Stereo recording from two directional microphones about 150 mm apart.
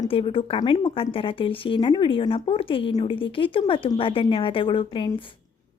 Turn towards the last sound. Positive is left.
turn(degrees=35)  # may be behind; listen again after turning